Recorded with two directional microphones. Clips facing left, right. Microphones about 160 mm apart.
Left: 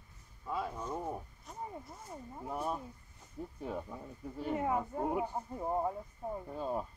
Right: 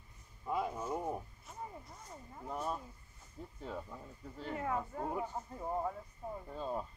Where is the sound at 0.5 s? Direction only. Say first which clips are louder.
Right 1 dB; 15° right (ahead or behind).